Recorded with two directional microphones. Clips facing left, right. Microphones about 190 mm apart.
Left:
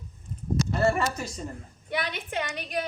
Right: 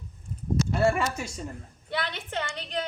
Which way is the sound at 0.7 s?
10° right (ahead or behind).